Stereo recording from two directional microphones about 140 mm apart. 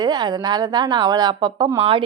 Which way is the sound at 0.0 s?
30° right (ahead or behind).